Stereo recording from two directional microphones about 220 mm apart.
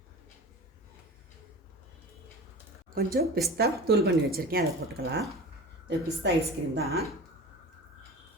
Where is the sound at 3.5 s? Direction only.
45° right (ahead or behind).